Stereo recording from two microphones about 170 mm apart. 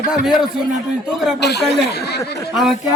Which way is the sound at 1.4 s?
75° left (ahead or behind).